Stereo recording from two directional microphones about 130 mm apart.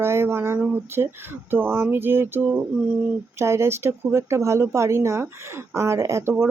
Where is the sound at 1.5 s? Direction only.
15° right (ahead or behind).